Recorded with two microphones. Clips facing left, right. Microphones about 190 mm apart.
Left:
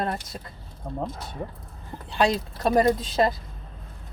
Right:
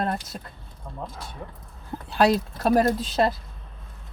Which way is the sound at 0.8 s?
45° left (ahead or behind).